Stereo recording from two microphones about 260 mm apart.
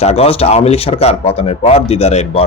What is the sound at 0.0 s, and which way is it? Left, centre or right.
Speech, left.